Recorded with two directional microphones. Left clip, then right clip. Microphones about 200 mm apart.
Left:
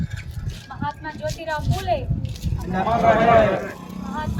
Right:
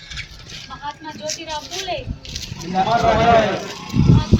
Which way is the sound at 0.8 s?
10° left (ahead or behind).